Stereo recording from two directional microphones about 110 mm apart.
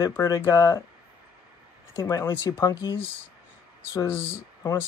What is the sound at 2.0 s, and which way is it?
Speech, 25° left (ahead or behind).